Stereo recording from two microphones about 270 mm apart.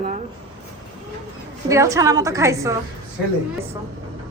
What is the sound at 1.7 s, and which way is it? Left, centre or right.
A woman's voice, centre.